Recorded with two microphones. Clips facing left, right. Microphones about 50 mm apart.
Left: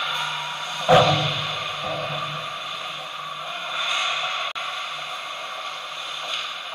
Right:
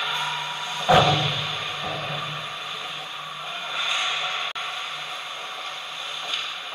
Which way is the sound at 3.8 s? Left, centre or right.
Left.